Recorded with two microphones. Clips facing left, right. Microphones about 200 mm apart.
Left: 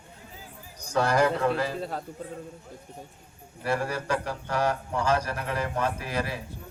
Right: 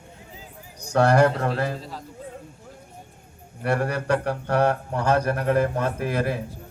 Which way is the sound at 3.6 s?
60° right (ahead or behind).